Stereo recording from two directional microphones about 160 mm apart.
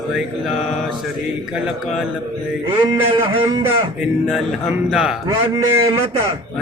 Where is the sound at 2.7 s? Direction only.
35° right (ahead or behind).